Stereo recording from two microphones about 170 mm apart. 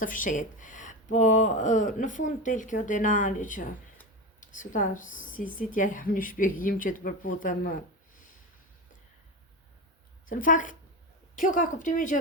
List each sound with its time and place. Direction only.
0.0 s speech: 50° left (ahead or behind)
10.2 s speech: 55° left (ahead or behind)